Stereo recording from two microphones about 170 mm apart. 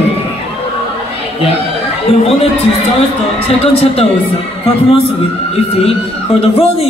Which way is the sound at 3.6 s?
35° left (ahead or behind).